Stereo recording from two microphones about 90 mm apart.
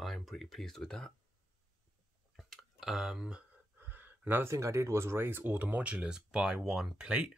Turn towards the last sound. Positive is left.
turn(degrees=-10)  # may be behind; listen again after turning